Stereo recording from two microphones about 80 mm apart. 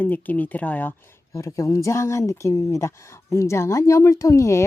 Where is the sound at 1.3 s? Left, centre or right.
Left.